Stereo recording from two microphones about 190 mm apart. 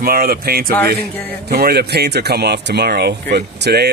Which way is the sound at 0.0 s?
50° right (ahead or behind).